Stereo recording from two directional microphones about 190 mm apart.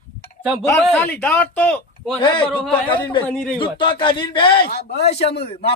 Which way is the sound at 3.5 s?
25° left (ahead or behind).